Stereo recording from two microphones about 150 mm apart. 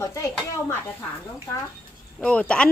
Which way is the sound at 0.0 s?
20° left (ahead or behind).